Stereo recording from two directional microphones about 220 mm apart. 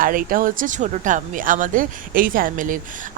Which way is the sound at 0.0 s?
40° right (ahead or behind).